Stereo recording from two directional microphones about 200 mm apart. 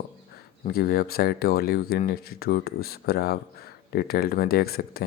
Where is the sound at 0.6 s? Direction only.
50° left (ahead or behind).